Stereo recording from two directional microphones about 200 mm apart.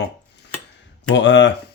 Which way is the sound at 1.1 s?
65° left (ahead or behind).